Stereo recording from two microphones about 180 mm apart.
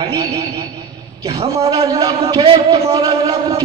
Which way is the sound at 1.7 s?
20° right (ahead or behind).